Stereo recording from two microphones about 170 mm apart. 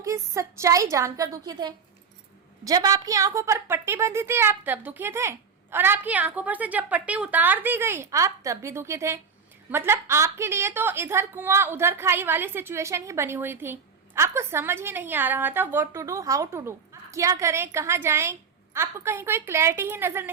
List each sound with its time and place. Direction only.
0.0 s a woman's voice: 20° right (ahead or behind)